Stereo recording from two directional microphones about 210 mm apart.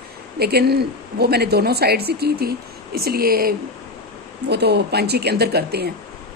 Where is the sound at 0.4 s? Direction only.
50° right (ahead or behind).